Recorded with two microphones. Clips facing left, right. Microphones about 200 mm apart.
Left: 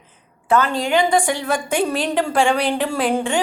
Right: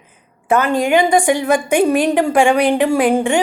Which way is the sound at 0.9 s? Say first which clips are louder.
Right 4 dB; 15° right (ahead or behind).